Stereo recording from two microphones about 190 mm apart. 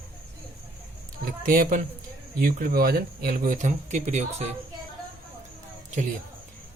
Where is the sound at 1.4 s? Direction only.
50° right (ahead or behind).